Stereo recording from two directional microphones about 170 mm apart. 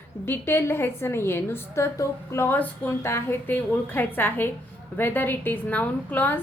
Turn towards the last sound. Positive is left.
turn(degrees=10)  # may be behind; listen again after turning